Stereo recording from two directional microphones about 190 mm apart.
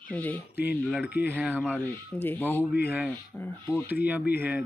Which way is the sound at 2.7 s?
10° right (ahead or behind).